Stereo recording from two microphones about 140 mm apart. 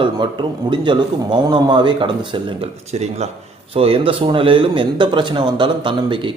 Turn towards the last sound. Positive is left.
turn(degrees=-35)  # may be behind; listen again after turning